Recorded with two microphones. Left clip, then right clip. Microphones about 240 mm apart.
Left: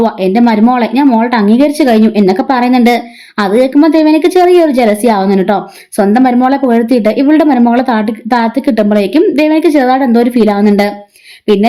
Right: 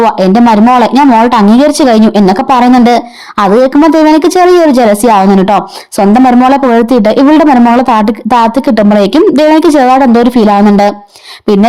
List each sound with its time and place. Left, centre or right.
0.0 s speech: right